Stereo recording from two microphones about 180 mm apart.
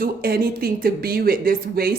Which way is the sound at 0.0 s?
60° right (ahead or behind).